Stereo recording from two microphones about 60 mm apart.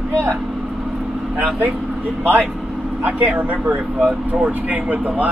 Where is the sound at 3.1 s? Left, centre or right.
Right.